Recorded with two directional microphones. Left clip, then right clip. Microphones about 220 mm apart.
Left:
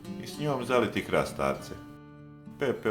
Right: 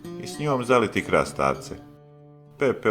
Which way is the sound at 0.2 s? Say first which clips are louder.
Right 6 dB; 30° right (ahead or behind).